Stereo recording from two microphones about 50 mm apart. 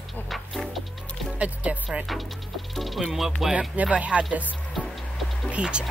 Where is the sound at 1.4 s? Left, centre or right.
Right.